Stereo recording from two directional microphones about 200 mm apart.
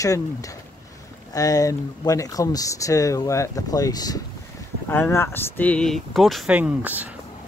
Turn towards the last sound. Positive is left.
turn(degrees=-10)  # may be behind; listen again after turning